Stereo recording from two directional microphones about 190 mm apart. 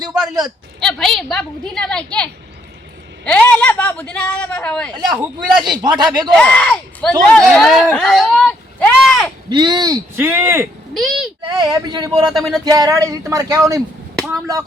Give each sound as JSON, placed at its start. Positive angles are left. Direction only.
{"t": 0.0, "sound": "speech", "side_deg": -20}
{"t": 0.8, "sound": "a woman's voice", "side_deg": 0}
{"t": 5.1, "sound": "a woman's voice", "side_deg": -5}
{"t": 5.7, "sound": "speech", "side_deg": -20}
{"t": 6.3, "sound": "a woman's voice", "side_deg": 5}
{"t": 7.9, "sound": "a sound", "side_deg": 0}
{"t": 9.5, "sound": "speech", "side_deg": -25}
{"t": 10.9, "sound": "a woman's voice", "side_deg": 0}
{"t": 11.4, "sound": "speech", "side_deg": -20}
{"t": 12.2, "sound": "a woman's voice", "side_deg": 0}
{"t": 12.6, "sound": "speech", "side_deg": -20}